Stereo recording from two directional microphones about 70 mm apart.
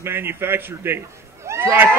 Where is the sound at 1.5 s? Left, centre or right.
Right.